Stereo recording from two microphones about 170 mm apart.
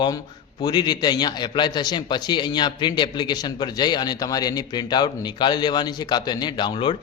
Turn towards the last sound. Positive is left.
turn(degrees=30)  # may be behind; listen again after turning